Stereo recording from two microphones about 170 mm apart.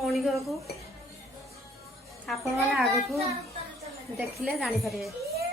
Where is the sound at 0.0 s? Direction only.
Centre (ahead or behind).